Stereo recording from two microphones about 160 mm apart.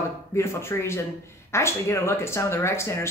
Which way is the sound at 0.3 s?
15° left (ahead or behind).